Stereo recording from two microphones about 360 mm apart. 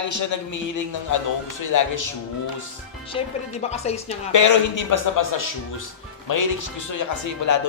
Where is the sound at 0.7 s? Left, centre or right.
Left.